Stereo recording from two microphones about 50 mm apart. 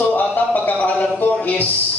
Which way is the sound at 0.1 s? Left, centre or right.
Left.